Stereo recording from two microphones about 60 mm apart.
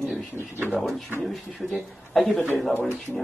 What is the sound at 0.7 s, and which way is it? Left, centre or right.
Speech, centre.